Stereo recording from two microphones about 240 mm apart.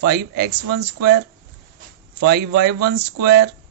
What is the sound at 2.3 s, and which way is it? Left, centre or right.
Speech, right.